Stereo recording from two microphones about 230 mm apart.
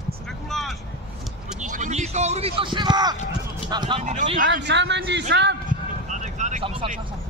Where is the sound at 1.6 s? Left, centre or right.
Right.